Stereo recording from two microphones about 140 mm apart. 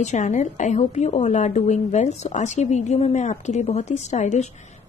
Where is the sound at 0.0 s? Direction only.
60° left (ahead or behind).